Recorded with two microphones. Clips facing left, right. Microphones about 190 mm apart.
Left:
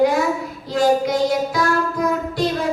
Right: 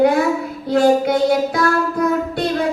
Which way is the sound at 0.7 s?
60° right (ahead or behind).